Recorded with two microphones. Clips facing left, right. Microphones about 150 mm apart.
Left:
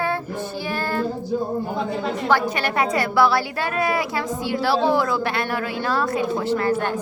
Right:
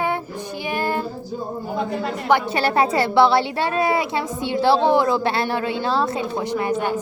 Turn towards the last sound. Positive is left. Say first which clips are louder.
# left 1 dB
turn(degrees=-15)  # may be behind; listen again after turning